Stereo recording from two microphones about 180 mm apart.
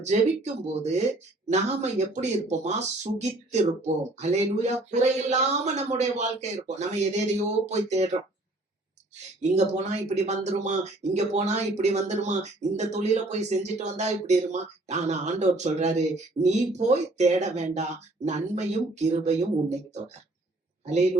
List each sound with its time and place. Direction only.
0.0 s speech: 40° right (ahead or behind)
9.4 s speech: 40° right (ahead or behind)
20.8 s speech: 40° right (ahead or behind)